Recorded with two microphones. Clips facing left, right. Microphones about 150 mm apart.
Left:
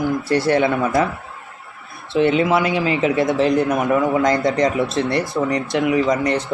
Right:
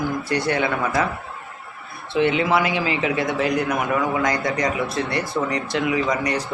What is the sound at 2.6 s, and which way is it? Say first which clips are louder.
Speech: left 3 dB; 20° right (ahead or behind).